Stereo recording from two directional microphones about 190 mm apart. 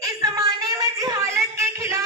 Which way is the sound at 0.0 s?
20° right (ahead or behind).